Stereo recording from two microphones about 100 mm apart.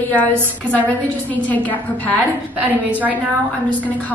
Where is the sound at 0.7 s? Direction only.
15° left (ahead or behind).